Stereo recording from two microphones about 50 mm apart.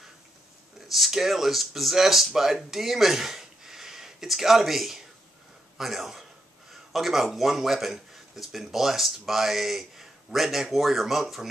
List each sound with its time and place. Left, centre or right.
0.7 s speech: centre
6.7 s a sound: centre
7.3 s speech: centre